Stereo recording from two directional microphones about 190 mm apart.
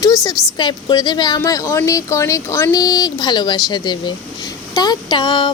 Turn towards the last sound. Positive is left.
turn(degrees=25)  # may be behind; listen again after turning